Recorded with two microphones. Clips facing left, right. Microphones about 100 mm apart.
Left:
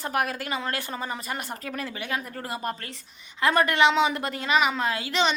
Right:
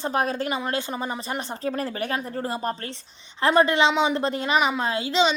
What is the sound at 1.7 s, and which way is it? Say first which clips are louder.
A woman's voice: right 1 dB; 35° right (ahead or behind).